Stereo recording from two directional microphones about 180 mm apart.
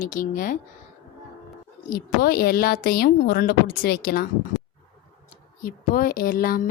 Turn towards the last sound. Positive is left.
turn(degrees=55)  # may be behind; listen again after turning